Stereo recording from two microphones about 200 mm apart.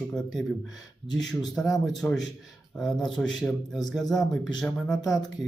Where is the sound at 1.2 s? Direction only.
Centre (ahead or behind).